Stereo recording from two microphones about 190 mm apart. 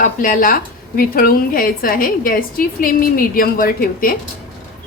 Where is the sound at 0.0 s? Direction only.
45° left (ahead or behind).